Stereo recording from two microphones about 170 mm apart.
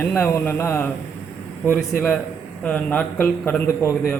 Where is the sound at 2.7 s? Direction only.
5° left (ahead or behind).